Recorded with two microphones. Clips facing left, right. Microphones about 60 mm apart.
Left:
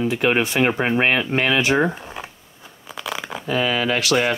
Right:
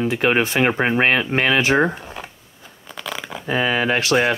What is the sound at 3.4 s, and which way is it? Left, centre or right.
Speech, right.